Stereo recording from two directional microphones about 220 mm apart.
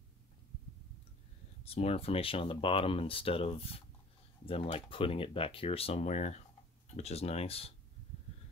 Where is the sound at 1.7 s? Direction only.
25° left (ahead or behind).